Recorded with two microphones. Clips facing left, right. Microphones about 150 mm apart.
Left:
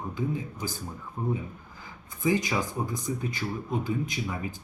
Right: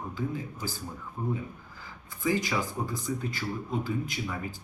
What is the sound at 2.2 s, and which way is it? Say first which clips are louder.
Speech: left 2 dB; 20° left (ahead or behind).